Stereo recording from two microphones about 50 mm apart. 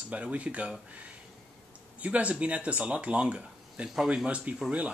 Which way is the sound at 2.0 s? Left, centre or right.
Right.